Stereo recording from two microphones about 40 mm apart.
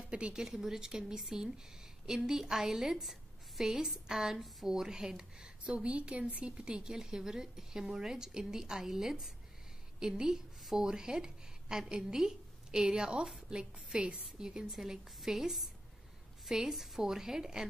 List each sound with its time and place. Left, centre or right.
0.0 s a sound: right
0.3 s a woman's voice: centre
5.6 s a woman's voice: right
14.7 s a woman's voice: centre